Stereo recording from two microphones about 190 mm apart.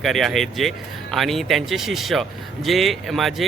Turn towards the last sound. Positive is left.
turn(degrees=0)  # may be behind; listen again after turning